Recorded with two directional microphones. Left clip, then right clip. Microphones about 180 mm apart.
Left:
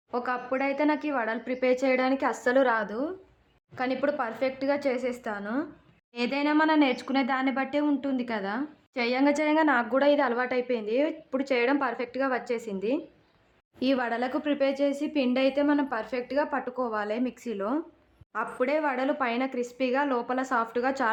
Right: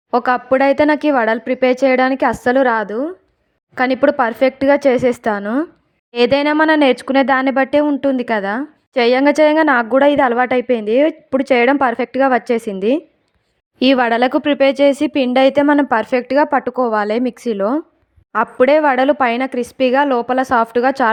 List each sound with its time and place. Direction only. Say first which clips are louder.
0.1 s speech: right 15 dB; 45° right (ahead or behind)